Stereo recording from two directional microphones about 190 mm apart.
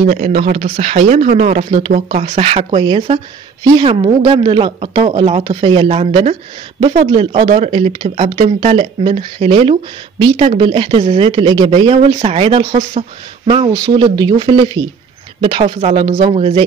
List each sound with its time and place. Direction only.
0.0 s speech: 40° right (ahead or behind)